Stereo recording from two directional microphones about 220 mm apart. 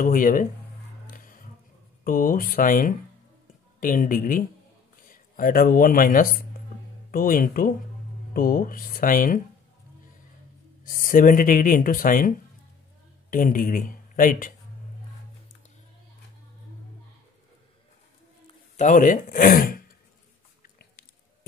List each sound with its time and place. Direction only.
0.0 s speech: 40° left (ahead or behind)
1.0 s music: 40° left (ahead or behind)
2.0 s speech: 40° left (ahead or behind)
10.8 s speech: 40° left (ahead or behind)
18.8 s speech: 35° left (ahead or behind)